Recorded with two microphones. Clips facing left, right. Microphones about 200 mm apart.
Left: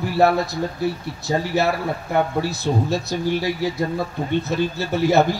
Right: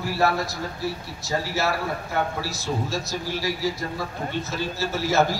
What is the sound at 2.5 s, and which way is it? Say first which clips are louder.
Speech: left 6 dB; 60° left (ahead or behind).